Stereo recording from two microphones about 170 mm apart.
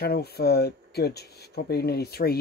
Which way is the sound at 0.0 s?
65° left (ahead or behind).